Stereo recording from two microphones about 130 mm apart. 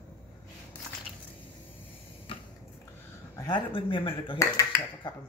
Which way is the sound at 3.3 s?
35° left (ahead or behind).